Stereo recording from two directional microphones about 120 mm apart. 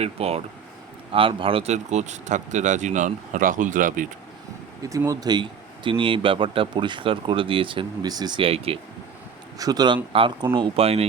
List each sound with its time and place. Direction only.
0.0 s speech: 60° right (ahead or behind)
1.1 s speech: 45° right (ahead or behind)
1.7 s speech: 70° right (ahead or behind); by 4.0 s 90° right
4.8 s speech: 25° right (ahead or behind)
8.4 s speech: 55° right (ahead or behind)
9.6 s speech: 30° right (ahead or behind); by 11.0 s 55° right (ahead or behind)